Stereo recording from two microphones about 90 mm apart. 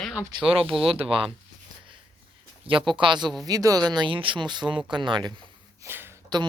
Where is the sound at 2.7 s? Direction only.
90° right.